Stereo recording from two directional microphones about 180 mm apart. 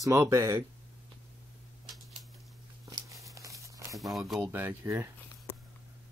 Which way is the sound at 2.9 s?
20° right (ahead or behind).